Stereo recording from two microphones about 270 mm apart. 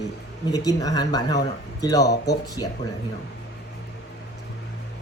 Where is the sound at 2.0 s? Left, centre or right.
Left.